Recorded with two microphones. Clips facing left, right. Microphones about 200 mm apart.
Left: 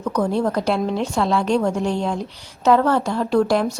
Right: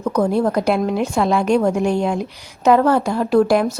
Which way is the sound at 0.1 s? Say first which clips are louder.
Right 3 dB; 10° right (ahead or behind).